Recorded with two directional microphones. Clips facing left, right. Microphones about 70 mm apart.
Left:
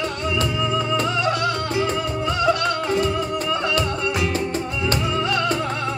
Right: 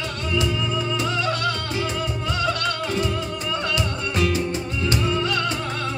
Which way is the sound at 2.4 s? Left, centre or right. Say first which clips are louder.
Left 5 dB; left.